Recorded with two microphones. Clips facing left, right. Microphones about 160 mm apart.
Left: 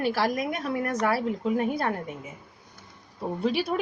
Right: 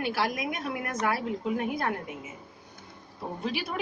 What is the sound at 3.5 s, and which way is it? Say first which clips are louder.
Speech: left 6 dB; 35° left (ahead or behind).